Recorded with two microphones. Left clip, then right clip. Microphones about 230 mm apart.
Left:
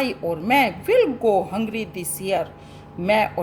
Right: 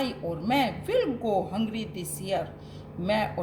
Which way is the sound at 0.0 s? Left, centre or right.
Left.